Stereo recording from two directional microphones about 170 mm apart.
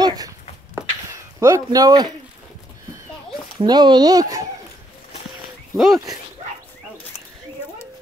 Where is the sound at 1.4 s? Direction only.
20° right (ahead or behind).